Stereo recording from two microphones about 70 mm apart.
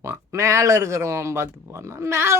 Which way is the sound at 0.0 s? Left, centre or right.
Right.